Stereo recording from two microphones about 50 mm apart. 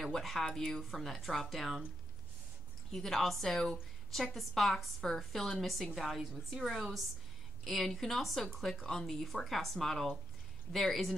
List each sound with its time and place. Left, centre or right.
0.0 s a woman's voice: centre
0.8 s a woman's voice: centre
2.9 s a woman's voice: centre